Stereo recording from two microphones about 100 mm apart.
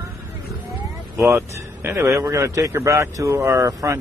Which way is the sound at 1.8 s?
25° right (ahead or behind).